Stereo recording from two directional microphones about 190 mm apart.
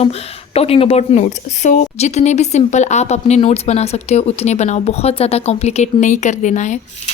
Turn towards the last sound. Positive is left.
turn(degrees=40)  # may be behind; listen again after turning